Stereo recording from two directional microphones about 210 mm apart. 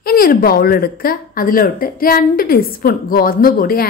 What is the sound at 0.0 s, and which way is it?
A woman's voice, 45° left (ahead or behind).